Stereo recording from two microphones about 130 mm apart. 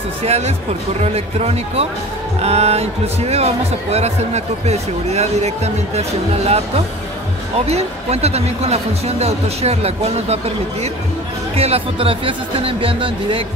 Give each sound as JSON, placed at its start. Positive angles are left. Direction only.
{"t": 0.2, "sound": "speech", "side_deg": -55}